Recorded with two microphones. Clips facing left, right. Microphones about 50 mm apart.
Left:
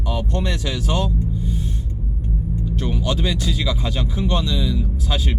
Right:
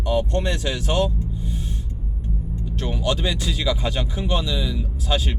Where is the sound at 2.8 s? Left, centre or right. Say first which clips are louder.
Even; centre.